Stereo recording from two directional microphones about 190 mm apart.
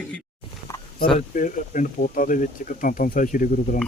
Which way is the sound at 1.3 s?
45° left (ahead or behind).